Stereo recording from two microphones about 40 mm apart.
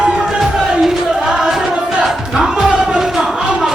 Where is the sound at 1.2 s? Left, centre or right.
Centre.